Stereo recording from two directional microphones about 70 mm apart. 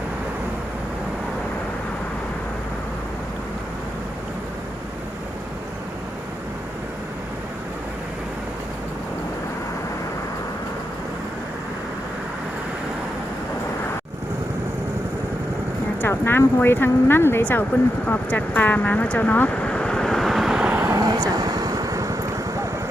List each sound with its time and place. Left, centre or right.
16.0 s speech: left
17.4 s speech: left; by 20.7 s centre
21.0 s vehicle: right